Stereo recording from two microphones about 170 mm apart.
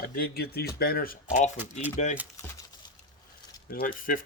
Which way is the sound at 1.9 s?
45° left (ahead or behind).